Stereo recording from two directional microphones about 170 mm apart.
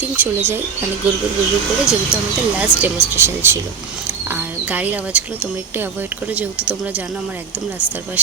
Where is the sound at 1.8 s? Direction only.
15° left (ahead or behind).